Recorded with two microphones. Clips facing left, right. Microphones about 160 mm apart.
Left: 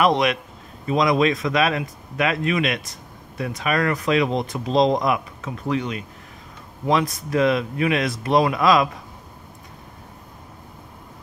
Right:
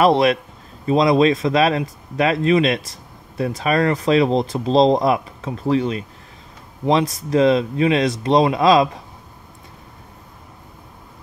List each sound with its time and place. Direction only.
0.0 s speech: 35° right (ahead or behind)